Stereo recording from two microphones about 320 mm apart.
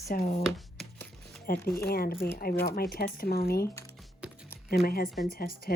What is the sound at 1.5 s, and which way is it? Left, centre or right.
Speech, left.